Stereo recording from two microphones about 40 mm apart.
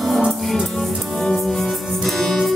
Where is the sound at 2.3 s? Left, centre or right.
Centre.